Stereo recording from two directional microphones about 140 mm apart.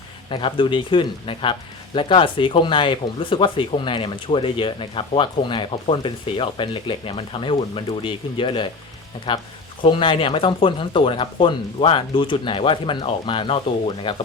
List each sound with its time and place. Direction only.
0.3 s speech: 35° left (ahead or behind)